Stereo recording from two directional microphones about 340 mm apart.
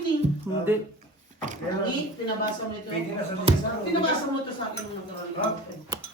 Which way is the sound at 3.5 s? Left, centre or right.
Centre.